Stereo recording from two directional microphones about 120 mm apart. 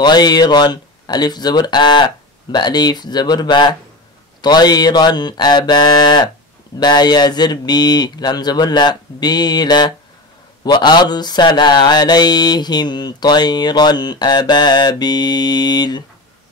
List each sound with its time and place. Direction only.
0.0 s mantra: 35° left (ahead or behind)